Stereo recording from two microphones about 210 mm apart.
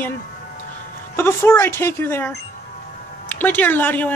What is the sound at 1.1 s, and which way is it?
Speech, 10° left (ahead or behind).